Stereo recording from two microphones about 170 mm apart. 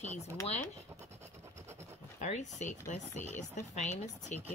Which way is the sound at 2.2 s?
45° left (ahead or behind).